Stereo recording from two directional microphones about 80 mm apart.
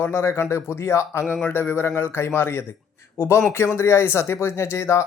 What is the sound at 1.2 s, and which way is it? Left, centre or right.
Speech, centre.